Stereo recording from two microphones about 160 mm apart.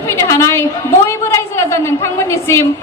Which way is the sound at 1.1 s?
15° left (ahead or behind).